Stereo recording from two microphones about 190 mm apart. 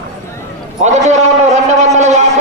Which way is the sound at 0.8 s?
40° right (ahead or behind).